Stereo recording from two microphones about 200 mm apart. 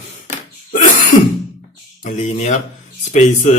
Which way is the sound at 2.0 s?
35° left (ahead or behind).